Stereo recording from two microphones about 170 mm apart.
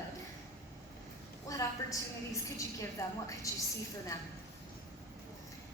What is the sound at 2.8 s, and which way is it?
Speech, 20° left (ahead or behind).